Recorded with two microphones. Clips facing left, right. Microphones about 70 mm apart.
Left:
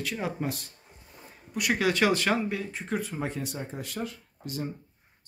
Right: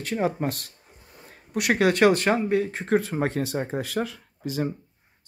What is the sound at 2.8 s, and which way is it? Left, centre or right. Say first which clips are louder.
Speech: right 5 dB; right.